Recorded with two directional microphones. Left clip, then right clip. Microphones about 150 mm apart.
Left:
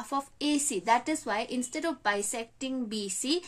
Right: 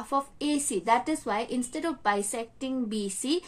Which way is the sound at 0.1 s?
25° left (ahead or behind).